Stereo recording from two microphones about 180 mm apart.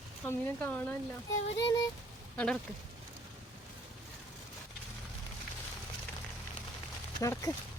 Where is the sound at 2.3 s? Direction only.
5° left (ahead or behind).